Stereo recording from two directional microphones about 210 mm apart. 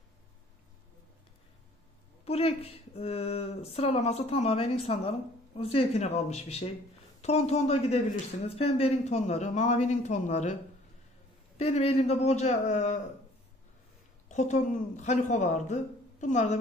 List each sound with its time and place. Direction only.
2.2 s a woman's voice: 30° left (ahead or behind)
14.3 s a woman's voice: 35° left (ahead or behind)